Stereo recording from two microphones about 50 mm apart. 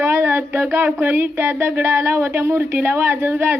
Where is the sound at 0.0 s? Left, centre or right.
Right.